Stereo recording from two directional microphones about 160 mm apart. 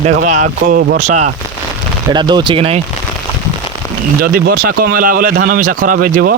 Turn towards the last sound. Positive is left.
turn(degrees=-65)  # may be behind; listen again after turning